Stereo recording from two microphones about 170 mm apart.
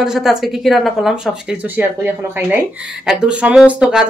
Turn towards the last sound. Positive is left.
turn(degrees=-5)  # may be behind; listen again after turning